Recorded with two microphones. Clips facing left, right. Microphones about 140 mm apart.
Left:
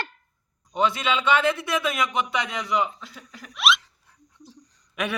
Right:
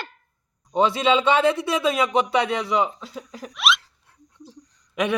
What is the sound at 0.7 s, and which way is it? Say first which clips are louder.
Speech: right 5 dB; 30° right (ahead or behind).